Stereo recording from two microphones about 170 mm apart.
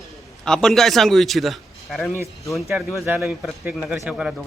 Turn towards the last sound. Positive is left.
turn(degrees=-5)  # may be behind; listen again after turning